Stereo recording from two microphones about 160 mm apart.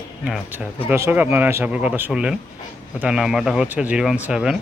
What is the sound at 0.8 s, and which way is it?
Speech, 15° right (ahead or behind).